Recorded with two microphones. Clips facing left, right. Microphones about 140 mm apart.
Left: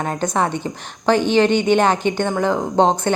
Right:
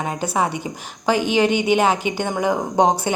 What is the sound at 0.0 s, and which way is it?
A woman's voice, 10° right (ahead or behind).